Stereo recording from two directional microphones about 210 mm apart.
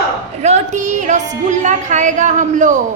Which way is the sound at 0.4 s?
35° right (ahead or behind).